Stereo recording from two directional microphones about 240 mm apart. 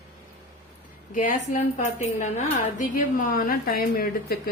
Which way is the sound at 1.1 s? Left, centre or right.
Left.